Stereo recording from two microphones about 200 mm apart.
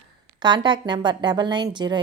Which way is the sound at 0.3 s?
20° right (ahead or behind).